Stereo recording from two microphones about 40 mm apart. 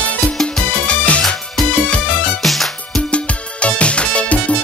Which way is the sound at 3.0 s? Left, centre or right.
Left.